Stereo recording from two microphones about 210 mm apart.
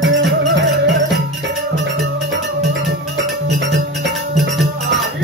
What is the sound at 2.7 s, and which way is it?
Music, 60° right (ahead or behind).